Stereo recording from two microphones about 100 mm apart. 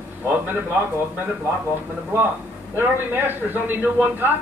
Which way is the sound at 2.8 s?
20° right (ahead or behind).